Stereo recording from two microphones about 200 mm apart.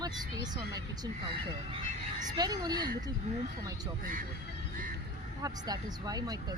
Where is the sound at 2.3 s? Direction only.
20° right (ahead or behind).